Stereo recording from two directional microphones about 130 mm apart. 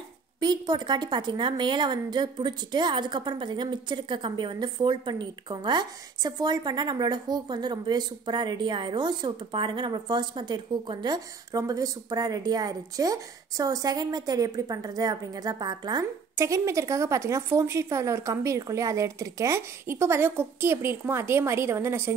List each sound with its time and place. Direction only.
0.4 s a woman's voice: 35° right (ahead or behind)